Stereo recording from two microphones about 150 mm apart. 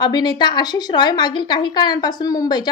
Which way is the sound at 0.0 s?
30° left (ahead or behind).